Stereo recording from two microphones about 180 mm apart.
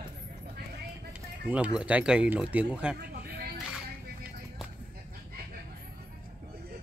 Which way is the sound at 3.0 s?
60° right (ahead or behind).